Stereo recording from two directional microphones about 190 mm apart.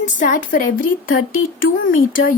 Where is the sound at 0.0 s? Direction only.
45° left (ahead or behind).